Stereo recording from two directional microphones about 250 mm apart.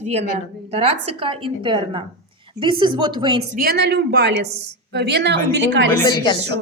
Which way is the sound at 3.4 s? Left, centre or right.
Right.